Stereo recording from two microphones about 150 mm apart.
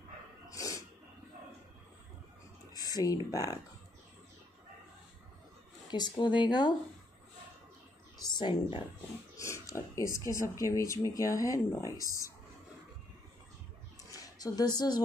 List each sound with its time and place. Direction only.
0.5 s sneeze: 20° left (ahead or behind)
2.7 s a sound: 25° left (ahead or behind)
3.3 s speech: 20° left (ahead or behind)
5.9 s speech: 30° left (ahead or behind)
8.2 s speech: 30° left (ahead or behind)
9.4 s speech: 20° left (ahead or behind)
14.1 s a sound: 25° left (ahead or behind)